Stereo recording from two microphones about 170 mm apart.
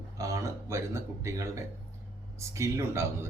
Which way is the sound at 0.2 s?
20° right (ahead or behind).